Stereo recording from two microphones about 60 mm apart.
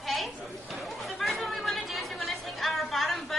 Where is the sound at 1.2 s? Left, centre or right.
Centre.